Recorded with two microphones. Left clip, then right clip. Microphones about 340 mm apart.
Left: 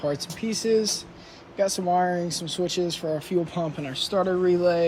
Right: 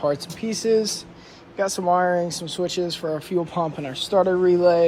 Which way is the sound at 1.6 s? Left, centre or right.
Centre.